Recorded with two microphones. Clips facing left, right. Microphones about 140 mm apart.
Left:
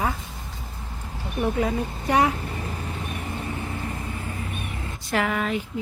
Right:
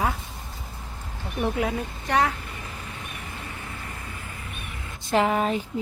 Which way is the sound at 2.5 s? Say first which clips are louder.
Left 6 dB; 35° left (ahead or behind).